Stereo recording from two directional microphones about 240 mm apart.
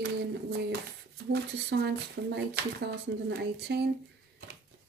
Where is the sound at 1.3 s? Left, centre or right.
Right.